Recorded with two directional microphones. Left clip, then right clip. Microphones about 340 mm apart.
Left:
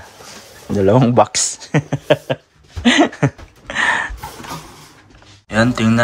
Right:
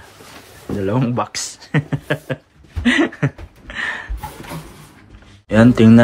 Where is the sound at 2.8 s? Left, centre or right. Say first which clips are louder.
Left 3 dB; centre.